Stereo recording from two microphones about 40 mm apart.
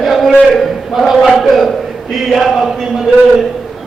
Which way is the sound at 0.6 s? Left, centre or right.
Centre.